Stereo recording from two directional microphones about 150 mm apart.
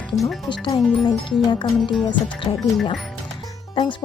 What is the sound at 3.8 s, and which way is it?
Speech, 35° left (ahead or behind).